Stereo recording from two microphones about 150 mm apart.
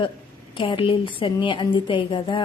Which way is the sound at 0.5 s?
35° left (ahead or behind).